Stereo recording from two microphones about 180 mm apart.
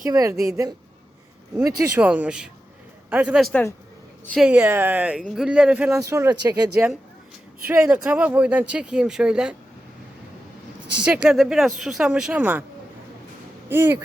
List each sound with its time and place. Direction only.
0.0 s a woman's voice: 20° right (ahead or behind)
2.0 s speech: 5° right (ahead or behind)
3.5 s speech: 15° left (ahead or behind)
4.4 s speech: 5° right (ahead or behind)
5.9 s speech: 15° right (ahead or behind)
7.7 s speech: 10° right (ahead or behind)
11.0 s speech: 5° right (ahead or behind)
13.7 s speech: 10° right (ahead or behind)